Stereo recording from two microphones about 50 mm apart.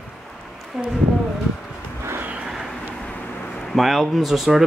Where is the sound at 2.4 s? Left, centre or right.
Centre.